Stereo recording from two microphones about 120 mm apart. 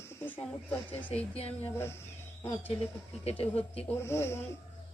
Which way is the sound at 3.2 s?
55° left (ahead or behind).